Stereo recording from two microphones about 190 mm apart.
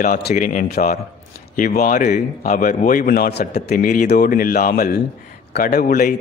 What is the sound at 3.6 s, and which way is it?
A man's voice, 45° left (ahead or behind).